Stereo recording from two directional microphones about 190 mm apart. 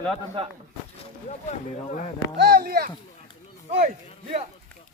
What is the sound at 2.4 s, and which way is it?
Speech, 55° right (ahead or behind).